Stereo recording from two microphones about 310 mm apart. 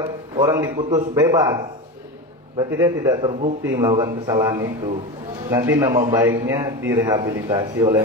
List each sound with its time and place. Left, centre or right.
0.0 s a man's voice: centre
2.8 s a man's voice: centre
5.7 s a man's voice: centre
6.2 s a man's voice: centre